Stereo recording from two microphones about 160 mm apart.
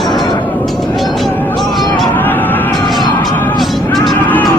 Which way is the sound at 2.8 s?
Centre (ahead or behind).